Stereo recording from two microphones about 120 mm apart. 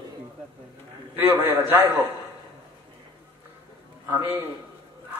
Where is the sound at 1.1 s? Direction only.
15° right (ahead or behind).